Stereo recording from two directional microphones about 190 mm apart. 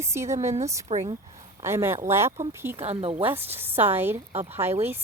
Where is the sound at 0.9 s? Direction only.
35° right (ahead or behind).